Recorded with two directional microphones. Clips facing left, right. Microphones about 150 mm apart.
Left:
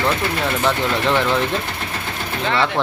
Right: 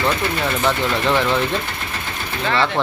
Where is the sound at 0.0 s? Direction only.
Centre (ahead or behind).